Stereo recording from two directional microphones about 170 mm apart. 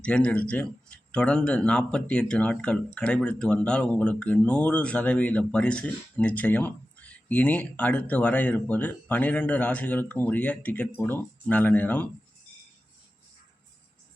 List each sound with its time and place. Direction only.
0.0 s speech: 5° left (ahead or behind)